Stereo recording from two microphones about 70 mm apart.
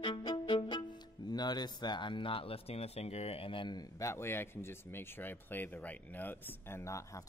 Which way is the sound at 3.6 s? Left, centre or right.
Left.